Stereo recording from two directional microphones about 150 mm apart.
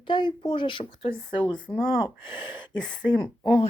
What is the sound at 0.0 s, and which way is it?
Speech, 35° left (ahead or behind).